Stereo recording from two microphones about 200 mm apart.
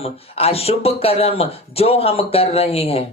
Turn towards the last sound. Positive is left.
turn(degrees=30)  # may be behind; listen again after turning